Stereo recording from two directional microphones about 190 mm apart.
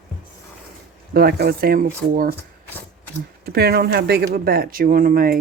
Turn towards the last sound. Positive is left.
turn(degrees=-50)  # may be behind; listen again after turning